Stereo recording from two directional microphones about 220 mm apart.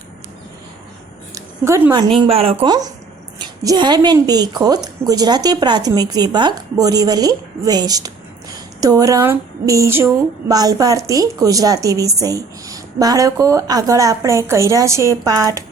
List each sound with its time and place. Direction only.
1.4 s a woman's voice: 15° right (ahead or behind)